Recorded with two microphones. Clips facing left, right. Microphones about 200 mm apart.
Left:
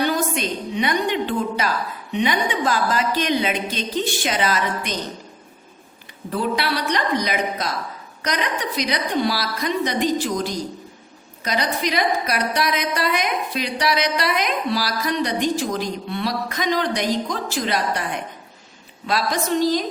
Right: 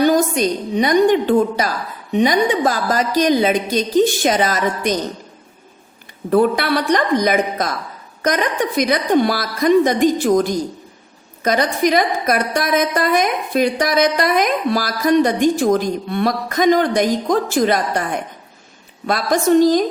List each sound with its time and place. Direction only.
0.0 s a woman's voice: 40° right (ahead or behind)
6.3 s a woman's voice: 55° right (ahead or behind)